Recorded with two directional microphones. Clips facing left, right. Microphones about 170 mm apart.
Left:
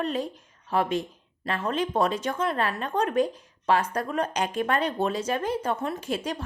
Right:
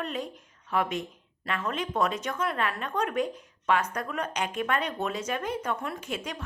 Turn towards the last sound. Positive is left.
turn(degrees=35)  # may be behind; listen again after turning